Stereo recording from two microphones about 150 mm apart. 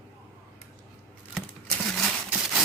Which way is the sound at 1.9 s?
Centre (ahead or behind).